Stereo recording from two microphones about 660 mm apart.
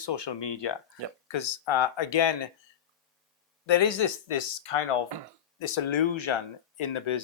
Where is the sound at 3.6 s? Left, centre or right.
Left.